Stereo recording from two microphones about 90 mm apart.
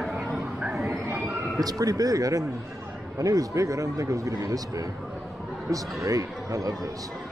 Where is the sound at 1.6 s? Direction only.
45° right (ahead or behind).